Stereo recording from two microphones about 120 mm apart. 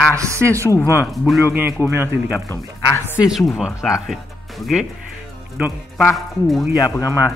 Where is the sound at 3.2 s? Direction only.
Centre (ahead or behind).